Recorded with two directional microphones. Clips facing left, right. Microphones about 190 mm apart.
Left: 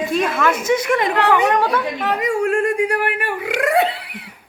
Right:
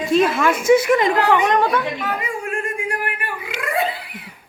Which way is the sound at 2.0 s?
70° left (ahead or behind).